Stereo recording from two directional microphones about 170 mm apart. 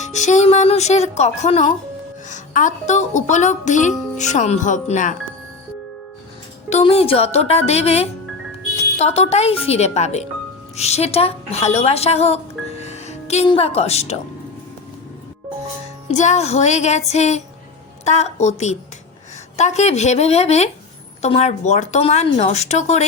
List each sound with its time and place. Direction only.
0.0 s a woman's voice: 45° left (ahead or behind)
6.7 s a woman's voice: 40° left (ahead or behind)
16.0 s a woman's voice: 45° left (ahead or behind)